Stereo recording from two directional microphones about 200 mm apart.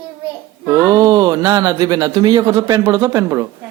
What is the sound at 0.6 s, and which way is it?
Speech, 20° right (ahead or behind).